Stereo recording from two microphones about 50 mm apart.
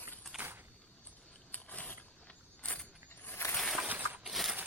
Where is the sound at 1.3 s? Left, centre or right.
Left.